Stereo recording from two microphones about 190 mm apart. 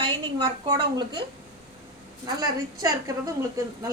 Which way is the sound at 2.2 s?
20° right (ahead or behind).